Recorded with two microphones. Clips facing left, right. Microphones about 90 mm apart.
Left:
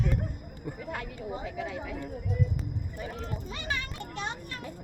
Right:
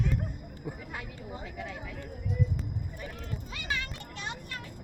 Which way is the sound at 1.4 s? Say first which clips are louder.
Left 4 dB; centre (ahead or behind).